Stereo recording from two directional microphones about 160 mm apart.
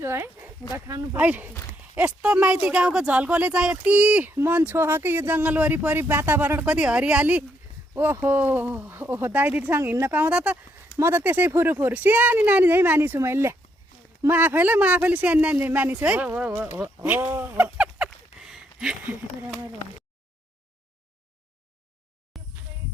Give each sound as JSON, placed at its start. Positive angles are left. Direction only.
{"t": 0.0, "sound": "speech", "side_deg": -15}
{"t": 17.3, "sound": "a sound", "side_deg": -10}
{"t": 22.3, "sound": "music", "side_deg": 0}